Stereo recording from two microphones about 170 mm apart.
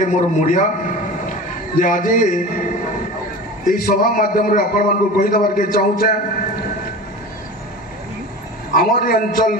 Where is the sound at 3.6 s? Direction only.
55° left (ahead or behind).